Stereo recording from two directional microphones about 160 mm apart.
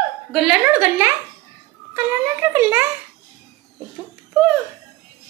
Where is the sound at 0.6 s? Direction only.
10° right (ahead or behind).